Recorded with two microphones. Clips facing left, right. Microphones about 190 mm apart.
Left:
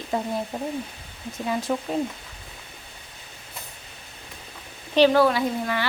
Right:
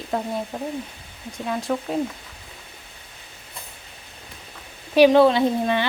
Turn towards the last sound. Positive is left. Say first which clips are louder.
# right 5 dB
turn(degrees=-25)  # may be behind; listen again after turning